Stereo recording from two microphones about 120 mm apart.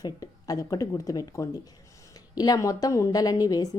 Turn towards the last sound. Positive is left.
turn(degrees=30)  # may be behind; listen again after turning